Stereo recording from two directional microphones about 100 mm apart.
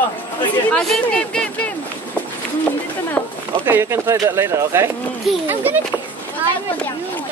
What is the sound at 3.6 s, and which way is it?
Speech, 25° right (ahead or behind).